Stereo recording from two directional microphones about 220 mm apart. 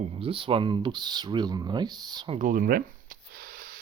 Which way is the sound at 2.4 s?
40° right (ahead or behind).